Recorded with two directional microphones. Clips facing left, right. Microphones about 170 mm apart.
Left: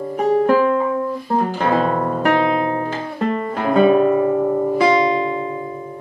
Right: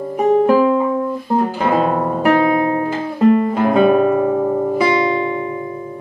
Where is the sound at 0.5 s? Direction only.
5° right (ahead or behind).